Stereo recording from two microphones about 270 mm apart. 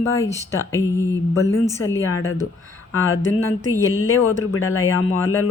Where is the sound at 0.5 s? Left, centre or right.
Centre.